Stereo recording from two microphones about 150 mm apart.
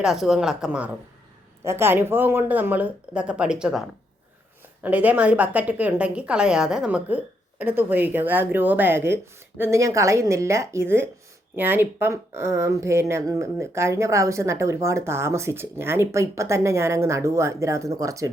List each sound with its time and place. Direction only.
0.0 s a woman's voice: centre (ahead or behind)
1.6 s a woman's voice: 15° right (ahead or behind)